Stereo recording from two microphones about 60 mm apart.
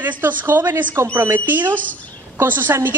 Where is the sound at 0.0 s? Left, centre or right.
Right.